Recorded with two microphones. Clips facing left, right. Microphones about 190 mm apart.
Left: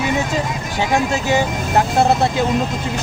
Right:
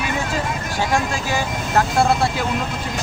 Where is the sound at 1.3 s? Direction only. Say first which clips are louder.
Left 5 dB; 20° left (ahead or behind).